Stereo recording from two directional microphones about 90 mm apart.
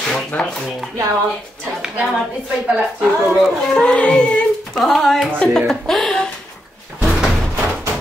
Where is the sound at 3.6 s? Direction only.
10° left (ahead or behind).